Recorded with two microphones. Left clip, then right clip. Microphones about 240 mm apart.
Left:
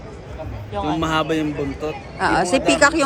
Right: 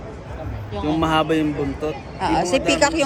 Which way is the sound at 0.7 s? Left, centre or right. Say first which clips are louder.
Right 1 dB; centre.